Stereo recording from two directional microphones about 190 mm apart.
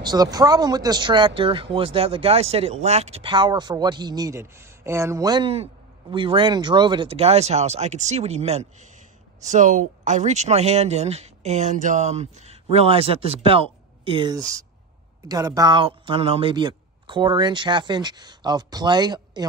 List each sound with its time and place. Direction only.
0.0 s speech: 20° right (ahead or behind)